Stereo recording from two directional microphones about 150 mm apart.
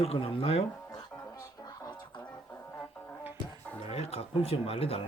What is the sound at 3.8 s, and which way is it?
Speech, 45° left (ahead or behind).